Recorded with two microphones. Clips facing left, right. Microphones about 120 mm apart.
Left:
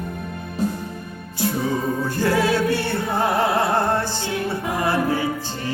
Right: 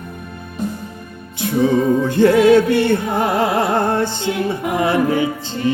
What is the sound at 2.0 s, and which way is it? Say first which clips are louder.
Music: right 8 dB; 20° right (ahead or behind).